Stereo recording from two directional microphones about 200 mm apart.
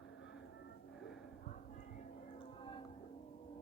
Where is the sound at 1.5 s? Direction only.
40° left (ahead or behind).